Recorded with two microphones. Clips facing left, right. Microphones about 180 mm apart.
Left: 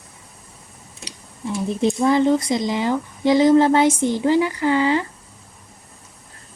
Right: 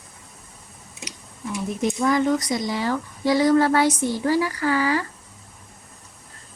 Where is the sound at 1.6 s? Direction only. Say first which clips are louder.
Left 4 dB; 30° left (ahead or behind).